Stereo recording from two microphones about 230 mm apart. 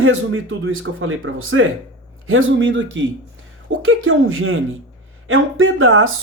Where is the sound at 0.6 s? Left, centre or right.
Right.